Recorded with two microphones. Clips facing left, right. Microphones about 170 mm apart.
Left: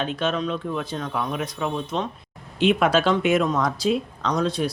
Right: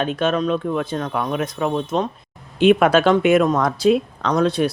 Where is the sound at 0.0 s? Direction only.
50° right (ahead or behind).